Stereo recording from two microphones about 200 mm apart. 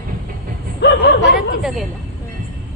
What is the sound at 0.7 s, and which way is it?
Speech, 55° left (ahead or behind).